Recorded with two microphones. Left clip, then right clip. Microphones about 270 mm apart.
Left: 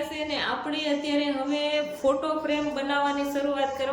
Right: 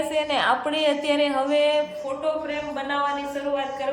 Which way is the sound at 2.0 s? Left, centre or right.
Left.